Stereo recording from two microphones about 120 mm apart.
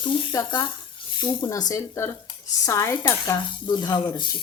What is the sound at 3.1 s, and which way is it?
Speech, 30° left (ahead or behind).